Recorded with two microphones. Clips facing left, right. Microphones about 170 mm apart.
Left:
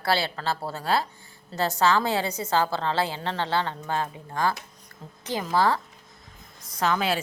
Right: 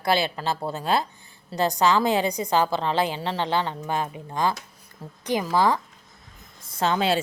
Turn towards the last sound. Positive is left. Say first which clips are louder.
# right 2 dB
turn(degrees=-25)  # may be behind; listen again after turning